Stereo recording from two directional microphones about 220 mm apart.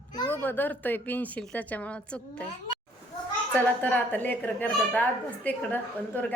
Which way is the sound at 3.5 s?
10° left (ahead or behind).